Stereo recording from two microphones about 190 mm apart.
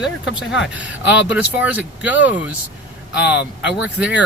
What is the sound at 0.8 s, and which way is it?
Speech, 5° right (ahead or behind).